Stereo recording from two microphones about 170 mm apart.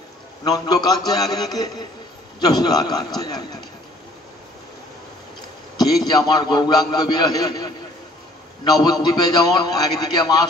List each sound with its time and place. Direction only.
0.4 s a man's voice: 25° left (ahead or behind)
6.0 s a man's voice: 25° left (ahead or behind)